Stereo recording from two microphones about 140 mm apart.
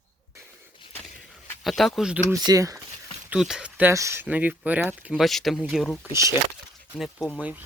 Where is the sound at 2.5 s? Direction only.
25° right (ahead or behind).